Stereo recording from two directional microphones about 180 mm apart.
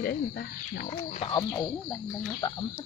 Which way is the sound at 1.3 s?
20° left (ahead or behind).